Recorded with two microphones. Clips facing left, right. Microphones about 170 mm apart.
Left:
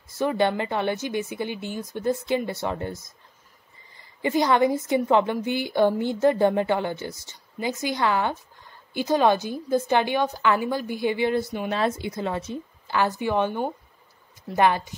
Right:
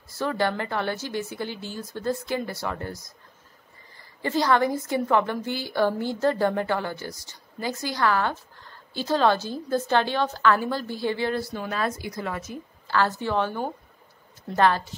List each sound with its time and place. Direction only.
0.1 s a woman's voice: 20° left (ahead or behind)
4.2 s a woman's voice: 15° left (ahead or behind)
12.8 s speech: 15° left (ahead or behind)